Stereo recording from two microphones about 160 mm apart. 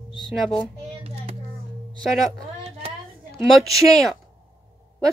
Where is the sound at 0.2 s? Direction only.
5° left (ahead or behind).